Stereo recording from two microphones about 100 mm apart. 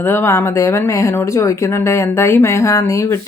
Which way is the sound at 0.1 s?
25° left (ahead or behind).